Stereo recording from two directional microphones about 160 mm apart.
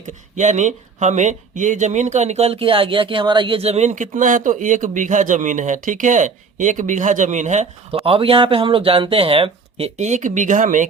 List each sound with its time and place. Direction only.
0.3 s speech: 50° right (ahead or behind)